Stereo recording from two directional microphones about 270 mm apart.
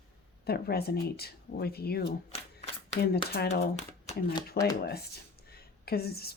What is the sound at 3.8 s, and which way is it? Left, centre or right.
Speech, left.